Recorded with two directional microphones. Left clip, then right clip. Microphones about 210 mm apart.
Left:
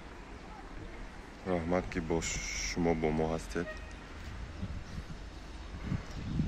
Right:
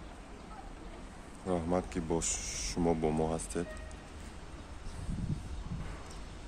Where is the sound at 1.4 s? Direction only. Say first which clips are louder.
Even; centre (ahead or behind).